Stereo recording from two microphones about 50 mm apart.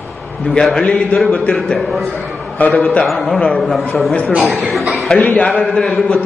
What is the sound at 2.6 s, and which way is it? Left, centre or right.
Speech, left.